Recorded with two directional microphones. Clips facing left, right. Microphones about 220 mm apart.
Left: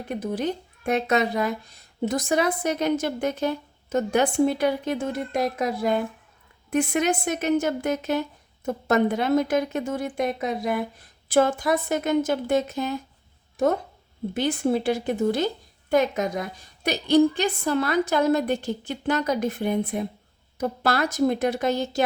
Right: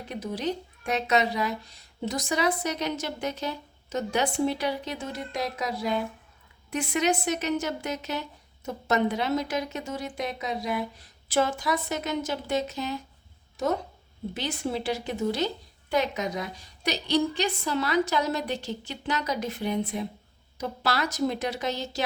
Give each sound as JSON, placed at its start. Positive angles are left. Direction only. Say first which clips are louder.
{"t": 0.1, "sound": "a woman's voice", "louder": "left 4 dB", "side_deg": 55}